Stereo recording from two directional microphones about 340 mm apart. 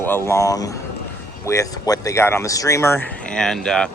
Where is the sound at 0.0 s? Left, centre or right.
Centre.